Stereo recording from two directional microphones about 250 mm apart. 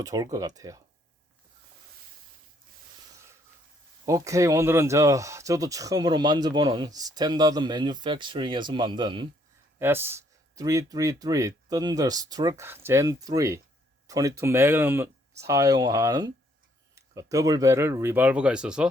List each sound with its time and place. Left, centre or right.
0.0 s speech: centre
4.0 s speech: centre